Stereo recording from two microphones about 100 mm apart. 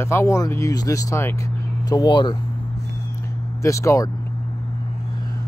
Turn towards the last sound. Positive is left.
turn(degrees=30)  # may be behind; listen again after turning